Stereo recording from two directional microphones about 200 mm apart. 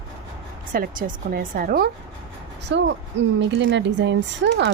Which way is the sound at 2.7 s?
65° right (ahead or behind).